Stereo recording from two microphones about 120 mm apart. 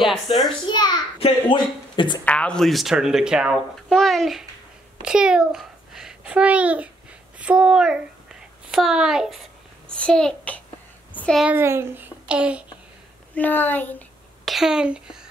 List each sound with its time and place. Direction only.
0.3 s a child's voice: 50° left (ahead or behind)
0.7 s a child's voice: 40° left (ahead or behind)
2.2 s a child's voice: 10° left (ahead or behind)
9.8 s a child's voice: 10° left (ahead or behind)
11.1 s a sound: 15° left (ahead or behind)
11.4 s speech: 20° right (ahead or behind)
13.3 s a child's voice: 15° left (ahead or behind)
14.4 s a woman's voice: centre (ahead or behind)